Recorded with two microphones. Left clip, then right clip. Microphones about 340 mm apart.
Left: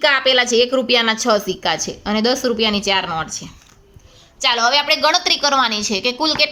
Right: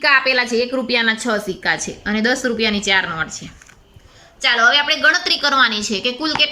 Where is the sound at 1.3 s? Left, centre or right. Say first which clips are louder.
Left 1 dB; centre.